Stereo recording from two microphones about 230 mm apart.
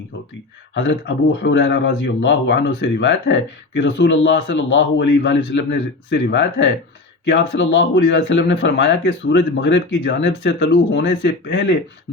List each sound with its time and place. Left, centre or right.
0.7 s speech: left